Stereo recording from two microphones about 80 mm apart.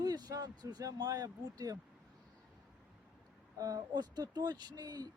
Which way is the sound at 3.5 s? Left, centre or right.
Right.